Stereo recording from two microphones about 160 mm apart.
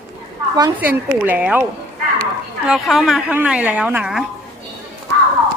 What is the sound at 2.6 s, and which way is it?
A woman's voice, centre (ahead or behind).